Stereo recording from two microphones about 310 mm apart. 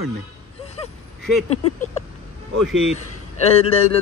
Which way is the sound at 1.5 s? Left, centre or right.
Left.